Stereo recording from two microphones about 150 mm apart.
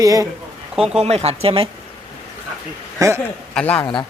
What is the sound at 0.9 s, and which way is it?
Speech, 45° right (ahead or behind).